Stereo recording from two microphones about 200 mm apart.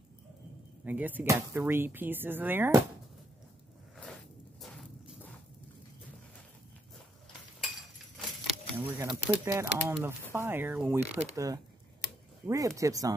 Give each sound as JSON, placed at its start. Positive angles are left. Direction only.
{"t": 0.8, "sound": "speech", "side_deg": -10}
{"t": 4.6, "sound": "walk", "side_deg": 0}
{"t": 8.7, "sound": "speech", "side_deg": -15}